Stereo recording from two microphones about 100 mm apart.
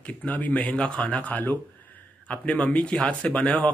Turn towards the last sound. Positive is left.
turn(degrees=15)  # may be behind; listen again after turning